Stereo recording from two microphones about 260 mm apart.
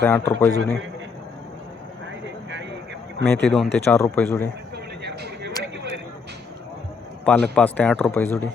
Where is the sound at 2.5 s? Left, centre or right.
Right.